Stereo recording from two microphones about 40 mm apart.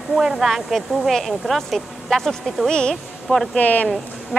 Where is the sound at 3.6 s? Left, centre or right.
Left.